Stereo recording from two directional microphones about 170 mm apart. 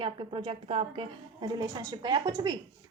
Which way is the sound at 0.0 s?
30° right (ahead or behind).